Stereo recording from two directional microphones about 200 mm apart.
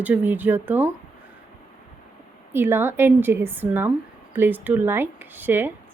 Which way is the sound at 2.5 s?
10° right (ahead or behind).